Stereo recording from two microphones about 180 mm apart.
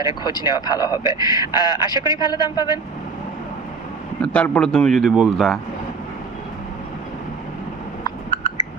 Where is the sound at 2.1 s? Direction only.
20° left (ahead or behind).